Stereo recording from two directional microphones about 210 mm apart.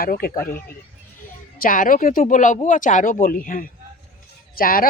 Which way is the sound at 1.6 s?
40° left (ahead or behind).